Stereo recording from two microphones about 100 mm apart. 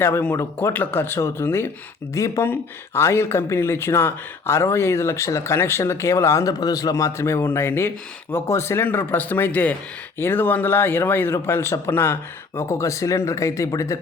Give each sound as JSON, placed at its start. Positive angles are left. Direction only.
{"t": 0.0, "sound": "speech", "side_deg": 20}